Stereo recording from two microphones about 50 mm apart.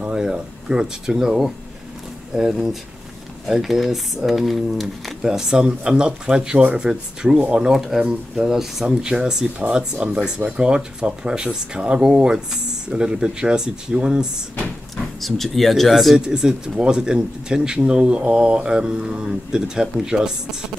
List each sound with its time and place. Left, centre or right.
0.1 s a sound: centre
2.5 s speech: centre
5.2 s speech: centre
7.3 s speech: right
7.8 s speech: centre
15.1 s speech: centre
16.2 s speech: centre